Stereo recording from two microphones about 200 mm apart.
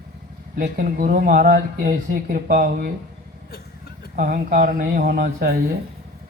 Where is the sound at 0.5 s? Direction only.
45° right (ahead or behind).